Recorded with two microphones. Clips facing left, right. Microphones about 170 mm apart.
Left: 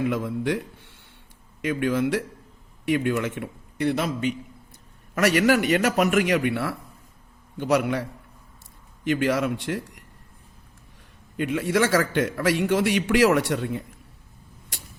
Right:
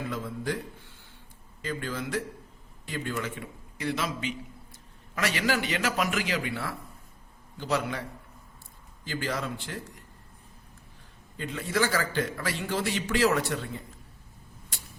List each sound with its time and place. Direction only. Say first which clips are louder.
0.0 s a man's voice: left 8 dB; 70° left (ahead or behind)
5.2 s a man's voice: left 9 dB; 60° left (ahead or behind)
9.0 s a man's voice: left 10 dB; 70° left (ahead or behind)
11.3 s a man's voice: left 6 dB; 70° left (ahead or behind)